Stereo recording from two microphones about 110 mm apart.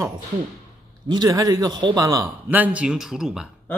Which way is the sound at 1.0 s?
40° right (ahead or behind).